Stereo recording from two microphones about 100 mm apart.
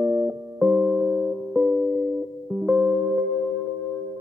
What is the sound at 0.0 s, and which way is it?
Music, 20° right (ahead or behind).